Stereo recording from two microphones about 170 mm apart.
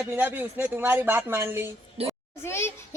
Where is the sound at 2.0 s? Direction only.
35° right (ahead or behind).